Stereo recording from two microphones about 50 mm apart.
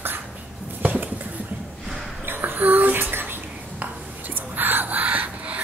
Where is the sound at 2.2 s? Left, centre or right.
Right.